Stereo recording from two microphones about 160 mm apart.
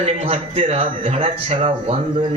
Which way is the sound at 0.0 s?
35° right (ahead or behind).